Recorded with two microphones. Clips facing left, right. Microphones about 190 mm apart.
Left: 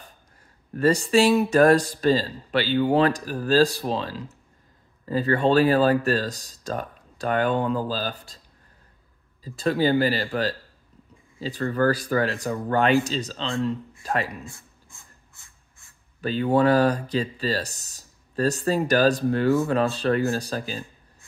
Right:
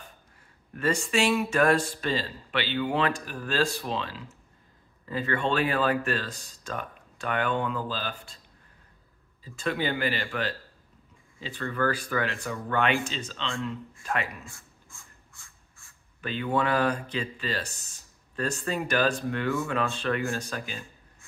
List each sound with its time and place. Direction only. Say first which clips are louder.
0.7 s speech: left 7 dB; 40° left (ahead or behind)
9.4 s speech: left 7 dB; 35° left (ahead or behind)
16.2 s speech: left 7 dB; 35° left (ahead or behind)